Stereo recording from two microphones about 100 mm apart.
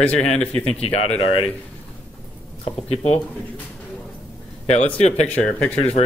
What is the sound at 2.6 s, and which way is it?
Speech, 90° left.